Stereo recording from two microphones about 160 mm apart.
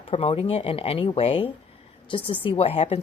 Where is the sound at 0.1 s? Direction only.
35° left (ahead or behind).